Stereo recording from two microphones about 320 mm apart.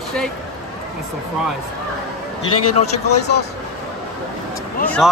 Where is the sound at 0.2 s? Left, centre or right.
Centre.